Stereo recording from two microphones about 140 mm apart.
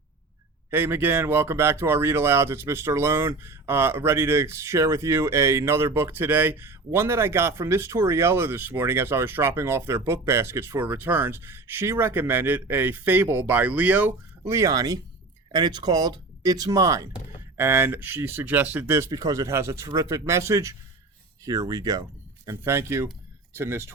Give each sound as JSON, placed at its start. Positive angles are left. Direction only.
{"t": 0.7, "sound": "speech", "side_deg": -15}